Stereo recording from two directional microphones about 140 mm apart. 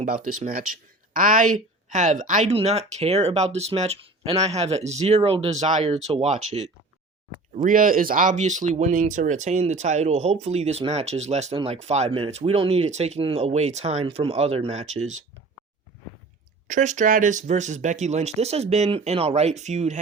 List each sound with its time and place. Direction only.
0.0 s speech: 65° right (ahead or behind)
7.6 s speech: 75° right (ahead or behind); by 15.2 s 55° right (ahead or behind)
16.6 s speech: 65° right (ahead or behind)